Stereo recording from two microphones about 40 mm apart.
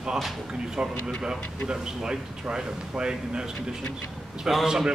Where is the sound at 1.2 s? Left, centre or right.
Centre.